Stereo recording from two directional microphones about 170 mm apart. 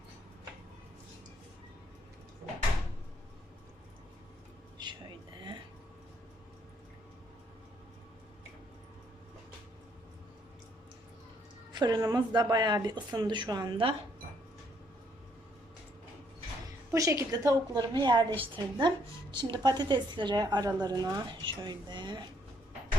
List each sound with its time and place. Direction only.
4.8 s a sound: 25° right (ahead or behind)
11.7 s a woman's voice: 25° right (ahead or behind)
16.9 s a woman's voice: 15° right (ahead or behind)